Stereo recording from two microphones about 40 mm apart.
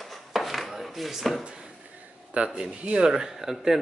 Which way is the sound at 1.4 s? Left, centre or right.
Centre.